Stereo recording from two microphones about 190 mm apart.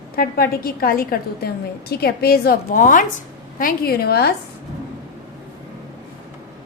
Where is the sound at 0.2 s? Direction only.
50° left (ahead or behind).